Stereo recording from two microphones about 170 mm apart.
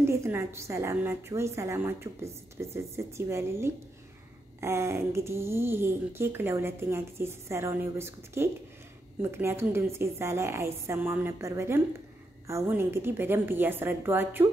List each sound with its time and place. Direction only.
0.0 s speech: 15° right (ahead or behind)